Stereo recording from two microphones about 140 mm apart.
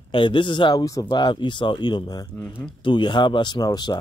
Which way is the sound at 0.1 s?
35° left (ahead or behind).